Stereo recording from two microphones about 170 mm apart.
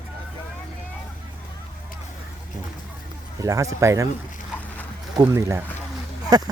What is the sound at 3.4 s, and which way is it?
Speech, 20° right (ahead or behind).